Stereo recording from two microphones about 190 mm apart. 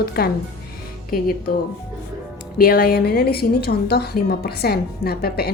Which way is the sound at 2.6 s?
50° left (ahead or behind).